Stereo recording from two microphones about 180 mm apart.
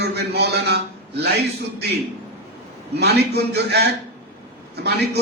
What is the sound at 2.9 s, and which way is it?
A man's voice, 65° right (ahead or behind).